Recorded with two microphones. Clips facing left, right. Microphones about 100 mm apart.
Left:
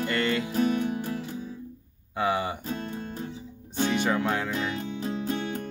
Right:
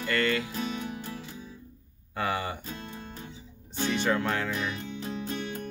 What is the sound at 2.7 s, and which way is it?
Music, 50° left (ahead or behind).